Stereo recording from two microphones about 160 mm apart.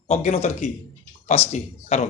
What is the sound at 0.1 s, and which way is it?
Speech, 45° left (ahead or behind).